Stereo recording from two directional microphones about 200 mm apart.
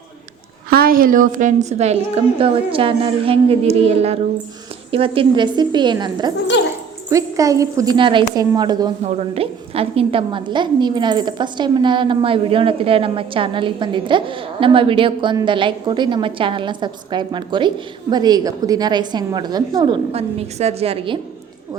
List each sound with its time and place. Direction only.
0.7 s a woman's voice: 45° right (ahead or behind); by 8.9 s 20° right (ahead or behind)
9.0 s a woman's voice: 30° right (ahead or behind)